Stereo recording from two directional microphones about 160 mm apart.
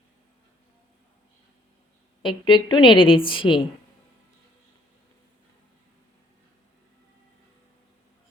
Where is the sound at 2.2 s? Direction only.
30° left (ahead or behind).